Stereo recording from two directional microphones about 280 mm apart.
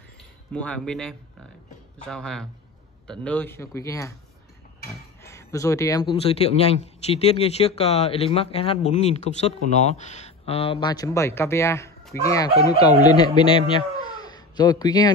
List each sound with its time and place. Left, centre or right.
0.5 s a man's voice: centre
5.2 s speech: centre